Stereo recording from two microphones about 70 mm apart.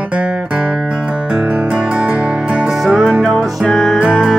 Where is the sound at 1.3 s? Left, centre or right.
Centre.